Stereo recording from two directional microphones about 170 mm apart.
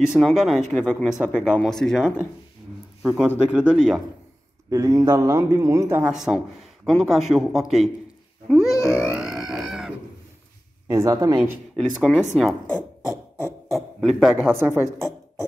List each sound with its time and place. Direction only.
0.2 s speech: centre (ahead or behind)
4.6 s speech: 20° right (ahead or behind); by 7.9 s centre (ahead or behind)
8.5 s grunt: centre (ahead or behind)
8.7 s grunt: 15° left (ahead or behind)
9.1 s pig: 5° right (ahead or behind)
10.9 s speech: 20° right (ahead or behind)
12.0 s a man's voice: 10° left (ahead or behind); by 14.9 s 15° right (ahead or behind)
15.0 s music: 20° left (ahead or behind)